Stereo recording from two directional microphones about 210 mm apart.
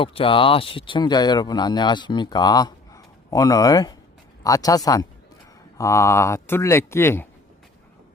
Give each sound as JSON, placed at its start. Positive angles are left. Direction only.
{"t": 0.0, "sound": "speech", "side_deg": 25}